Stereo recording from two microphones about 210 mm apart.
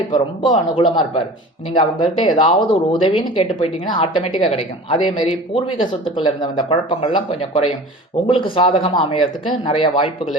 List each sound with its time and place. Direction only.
0.1 s speech: 25° left (ahead or behind)